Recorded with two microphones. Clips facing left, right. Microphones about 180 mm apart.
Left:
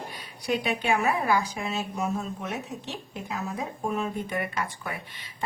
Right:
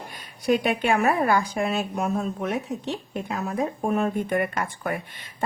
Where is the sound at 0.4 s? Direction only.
50° right (ahead or behind).